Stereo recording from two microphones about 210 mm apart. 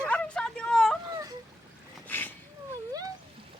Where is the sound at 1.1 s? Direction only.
15° right (ahead or behind).